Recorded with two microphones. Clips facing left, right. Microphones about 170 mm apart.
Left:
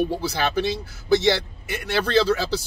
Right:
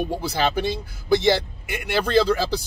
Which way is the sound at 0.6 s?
50° right (ahead or behind).